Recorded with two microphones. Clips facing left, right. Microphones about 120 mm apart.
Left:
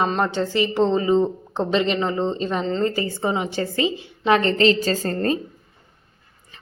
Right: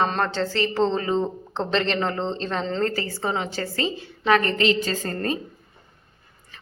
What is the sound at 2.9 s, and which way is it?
A woman's voice, 20° left (ahead or behind).